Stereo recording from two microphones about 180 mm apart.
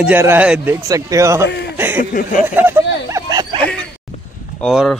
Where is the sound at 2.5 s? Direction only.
15° right (ahead or behind).